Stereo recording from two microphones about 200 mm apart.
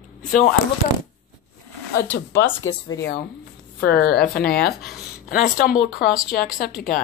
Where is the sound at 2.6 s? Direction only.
70° left (ahead or behind).